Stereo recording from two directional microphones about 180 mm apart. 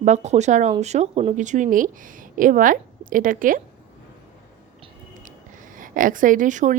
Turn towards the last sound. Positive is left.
turn(degrees=-45)  # may be behind; listen again after turning